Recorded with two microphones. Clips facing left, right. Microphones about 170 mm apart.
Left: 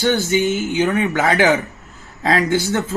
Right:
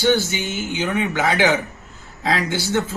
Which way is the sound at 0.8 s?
50° left (ahead or behind).